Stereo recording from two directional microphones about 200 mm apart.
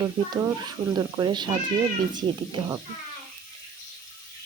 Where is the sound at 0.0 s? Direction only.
20° right (ahead or behind).